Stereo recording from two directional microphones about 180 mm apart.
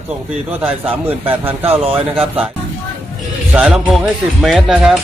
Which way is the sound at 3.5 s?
5° right (ahead or behind).